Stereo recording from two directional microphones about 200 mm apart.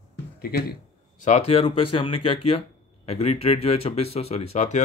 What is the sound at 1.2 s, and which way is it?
Speech, 35° left (ahead or behind).